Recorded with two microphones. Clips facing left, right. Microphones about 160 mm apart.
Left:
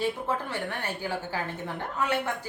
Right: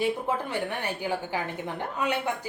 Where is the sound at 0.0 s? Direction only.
15° right (ahead or behind).